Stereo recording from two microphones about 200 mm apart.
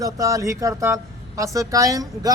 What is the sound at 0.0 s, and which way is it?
Speech, 15° right (ahead or behind).